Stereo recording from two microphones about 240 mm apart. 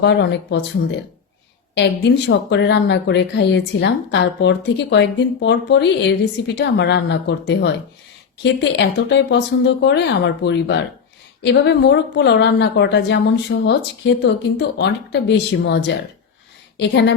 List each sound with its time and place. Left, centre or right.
0.0 s a woman's voice: left
8.8 s a woman's voice: left